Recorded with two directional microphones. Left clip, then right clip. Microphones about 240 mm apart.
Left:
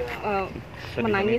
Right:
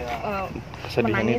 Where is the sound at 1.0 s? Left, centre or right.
Right.